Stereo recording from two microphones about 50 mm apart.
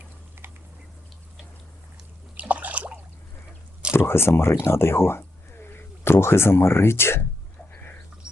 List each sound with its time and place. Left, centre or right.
2.3 s water: right
3.9 s speech: left